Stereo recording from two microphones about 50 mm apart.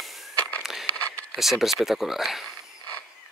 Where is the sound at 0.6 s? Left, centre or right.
Centre.